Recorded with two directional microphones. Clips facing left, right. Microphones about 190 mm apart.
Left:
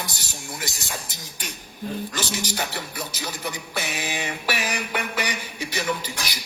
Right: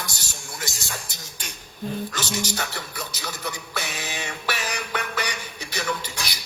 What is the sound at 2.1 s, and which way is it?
Music, 15° left (ahead or behind).